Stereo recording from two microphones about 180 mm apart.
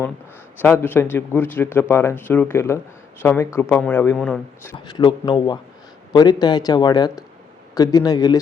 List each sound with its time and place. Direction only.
0.6 s a man's voice: 10° left (ahead or behind)
4.9 s speech: 25° left (ahead or behind)